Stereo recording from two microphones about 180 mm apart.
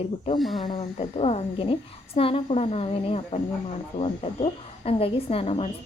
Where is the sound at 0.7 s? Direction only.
30° left (ahead or behind).